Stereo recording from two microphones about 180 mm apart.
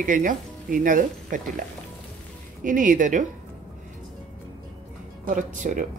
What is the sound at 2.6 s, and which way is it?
Speech, 45° right (ahead or behind).